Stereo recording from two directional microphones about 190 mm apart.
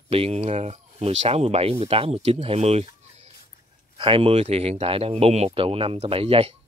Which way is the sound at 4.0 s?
30° right (ahead or behind).